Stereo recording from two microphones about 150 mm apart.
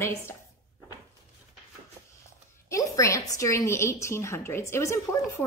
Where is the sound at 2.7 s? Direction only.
20° left (ahead or behind).